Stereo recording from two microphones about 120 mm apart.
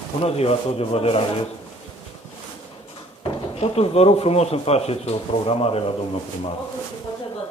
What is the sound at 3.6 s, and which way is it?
Speech, 55° left (ahead or behind).